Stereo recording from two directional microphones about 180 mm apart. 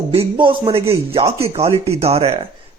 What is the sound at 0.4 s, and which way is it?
A man's voice, 30° right (ahead or behind).